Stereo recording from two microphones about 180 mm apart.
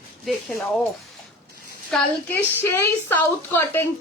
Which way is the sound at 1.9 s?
10° left (ahead or behind).